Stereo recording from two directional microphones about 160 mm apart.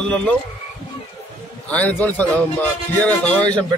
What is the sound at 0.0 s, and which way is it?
Speech, 5° left (ahead or behind).